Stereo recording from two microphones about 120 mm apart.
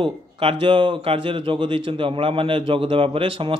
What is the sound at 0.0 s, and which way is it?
A man's voice, 45° right (ahead or behind).